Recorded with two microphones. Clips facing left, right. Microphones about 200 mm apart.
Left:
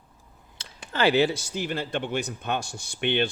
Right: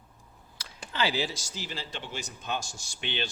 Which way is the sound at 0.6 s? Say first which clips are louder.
Left 1 dB; 25° left (ahead or behind).